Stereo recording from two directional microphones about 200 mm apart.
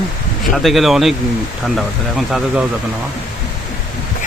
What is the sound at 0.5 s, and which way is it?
Speech, centre (ahead or behind).